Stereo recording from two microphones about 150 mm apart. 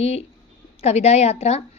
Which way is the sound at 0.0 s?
45° left (ahead or behind).